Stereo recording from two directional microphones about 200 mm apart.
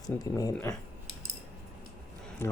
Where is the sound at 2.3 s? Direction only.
10° left (ahead or behind).